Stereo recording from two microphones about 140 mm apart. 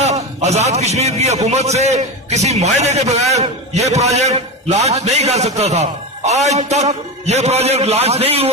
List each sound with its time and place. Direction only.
0.0 s a man's voice: 50° right (ahead or behind)